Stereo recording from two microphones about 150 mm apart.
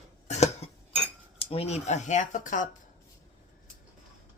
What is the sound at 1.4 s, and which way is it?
Speech, 40° left (ahead or behind).